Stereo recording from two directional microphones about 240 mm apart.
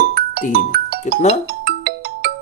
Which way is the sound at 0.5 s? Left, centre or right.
Right.